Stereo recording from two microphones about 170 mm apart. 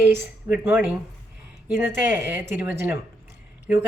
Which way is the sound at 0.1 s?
15° right (ahead or behind).